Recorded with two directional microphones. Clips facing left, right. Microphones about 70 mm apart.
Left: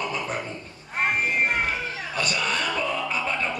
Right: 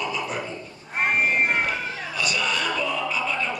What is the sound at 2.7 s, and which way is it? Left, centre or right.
Music, left.